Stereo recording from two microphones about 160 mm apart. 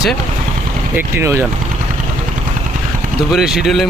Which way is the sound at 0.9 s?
15° right (ahead or behind).